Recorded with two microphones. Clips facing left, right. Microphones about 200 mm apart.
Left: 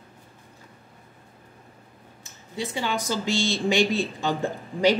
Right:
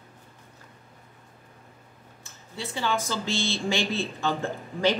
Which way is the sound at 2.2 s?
15° left (ahead or behind).